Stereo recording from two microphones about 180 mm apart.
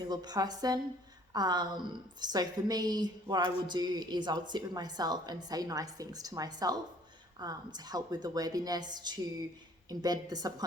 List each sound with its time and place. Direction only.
0.1 s a woman's voice: 20° right (ahead or behind)